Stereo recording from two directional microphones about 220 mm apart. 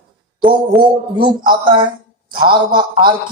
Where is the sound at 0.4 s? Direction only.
5° right (ahead or behind).